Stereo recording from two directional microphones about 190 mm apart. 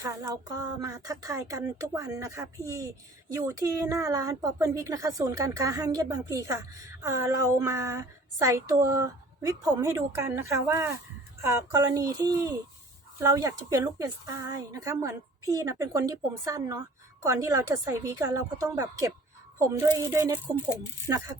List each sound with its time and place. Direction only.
0.0 s a woman's voice: 20° right (ahead or behind)